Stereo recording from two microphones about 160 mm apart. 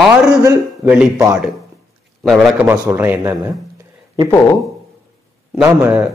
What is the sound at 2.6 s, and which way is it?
Speech, 15° right (ahead or behind).